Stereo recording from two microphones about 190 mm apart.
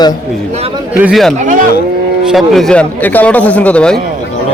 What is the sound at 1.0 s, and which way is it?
A man's voice, centre (ahead or behind).